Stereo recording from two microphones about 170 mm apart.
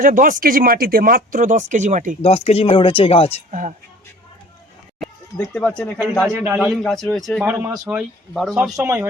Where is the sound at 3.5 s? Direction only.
50° right (ahead or behind).